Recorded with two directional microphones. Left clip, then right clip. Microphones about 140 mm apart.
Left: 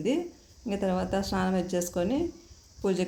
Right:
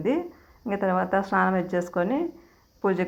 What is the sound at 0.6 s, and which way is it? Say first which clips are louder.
A woman's voice: right 5 dB; 15° left (ahead or behind).